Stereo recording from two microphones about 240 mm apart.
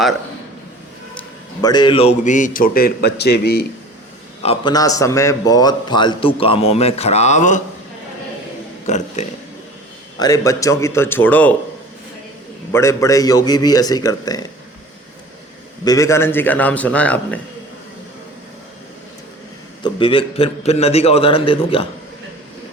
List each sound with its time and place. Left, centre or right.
1.6 s a man's voice: centre; by 3.7 s left
4.4 s a man's voice: centre
8.9 s a man's voice: left
10.2 s a man's voice: centre
12.7 s a man's voice: centre
15.8 s a man's voice: centre
19.8 s a man's voice: left